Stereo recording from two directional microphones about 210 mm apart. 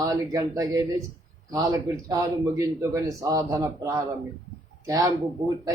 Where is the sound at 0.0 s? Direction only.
15° right (ahead or behind).